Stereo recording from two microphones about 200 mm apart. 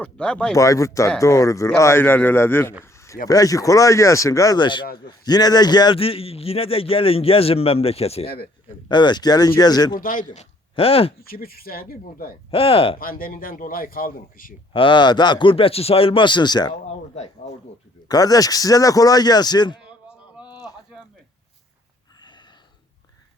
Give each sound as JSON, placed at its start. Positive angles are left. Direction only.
{"t": 0.0, "sound": "speech", "side_deg": 5}
{"t": 0.5, "sound": "speech", "side_deg": 15}
{"t": 2.8, "sound": "a sound", "side_deg": 15}
{"t": 3.2, "sound": "a man's voice", "side_deg": 15}
{"t": 10.0, "sound": "speech", "side_deg": 45}
{"t": 10.8, "sound": "a man's voice", "side_deg": 30}
{"t": 11.2, "sound": "speech", "side_deg": 50}
{"t": 12.5, "sound": "a man's voice", "side_deg": 30}
{"t": 13.0, "sound": "speech", "side_deg": 45}
{"t": 14.7, "sound": "a man's voice", "side_deg": 25}
{"t": 18.1, "sound": "a man's voice", "side_deg": 20}
{"t": 19.8, "sound": "a sound", "side_deg": -5}
{"t": 20.5, "sound": "a sound", "side_deg": 20}